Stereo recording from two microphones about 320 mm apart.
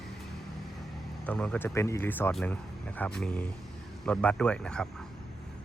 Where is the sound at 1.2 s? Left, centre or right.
Centre.